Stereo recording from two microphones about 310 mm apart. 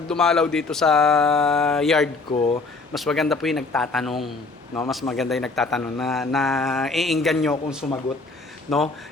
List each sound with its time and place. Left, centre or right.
0.1 s a man's voice: centre
2.3 s speech: centre
2.9 s a man's voice: centre
8.7 s a man's voice: centre